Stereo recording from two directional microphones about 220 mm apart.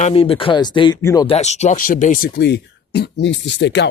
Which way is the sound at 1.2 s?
30° left (ahead or behind).